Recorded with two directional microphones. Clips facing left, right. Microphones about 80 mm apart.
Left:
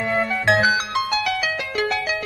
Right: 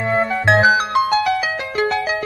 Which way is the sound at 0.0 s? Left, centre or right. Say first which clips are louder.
Right 3 dB; right.